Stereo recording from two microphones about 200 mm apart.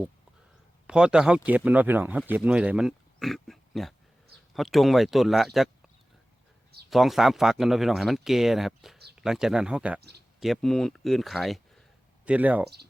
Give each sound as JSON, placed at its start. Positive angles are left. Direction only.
{"t": 0.9, "sound": "speech", "side_deg": -5}
{"t": 6.9, "sound": "speech", "side_deg": 0}
{"t": 10.0, "sound": "speech", "side_deg": -55}
{"t": 10.4, "sound": "speech", "side_deg": 0}